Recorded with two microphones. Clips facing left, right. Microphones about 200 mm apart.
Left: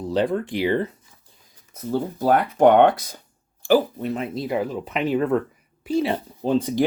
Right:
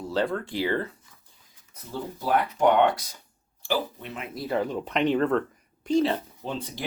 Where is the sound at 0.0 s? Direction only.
20° left (ahead or behind).